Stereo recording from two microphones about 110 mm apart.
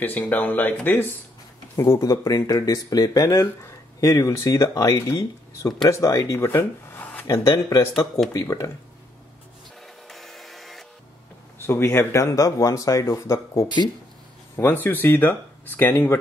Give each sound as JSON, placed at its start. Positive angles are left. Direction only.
{"t": 0.0, "sound": "speech", "side_deg": 15}
{"t": 1.8, "sound": "speech", "side_deg": 30}
{"t": 10.0, "sound": "printer", "side_deg": 0}
{"t": 11.5, "sound": "speech", "side_deg": 20}